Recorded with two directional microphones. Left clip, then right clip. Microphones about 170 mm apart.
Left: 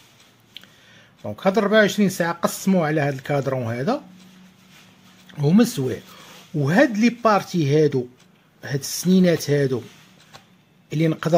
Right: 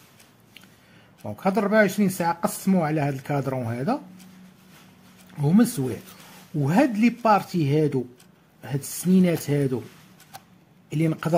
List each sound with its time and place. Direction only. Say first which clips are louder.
1.2 s speech: left 4 dB; 50° left (ahead or behind)
5.4 s speech: left 3 dB; 50° left (ahead or behind)
10.9 s speech: left 4 dB; 50° left (ahead or behind)